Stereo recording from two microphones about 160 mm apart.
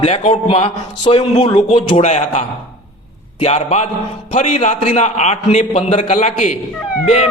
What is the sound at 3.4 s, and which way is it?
A man's voice, 45° left (ahead or behind).